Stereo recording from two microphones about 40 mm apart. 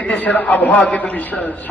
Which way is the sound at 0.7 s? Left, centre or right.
Left.